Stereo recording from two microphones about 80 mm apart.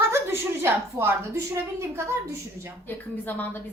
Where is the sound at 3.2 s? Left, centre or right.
Left.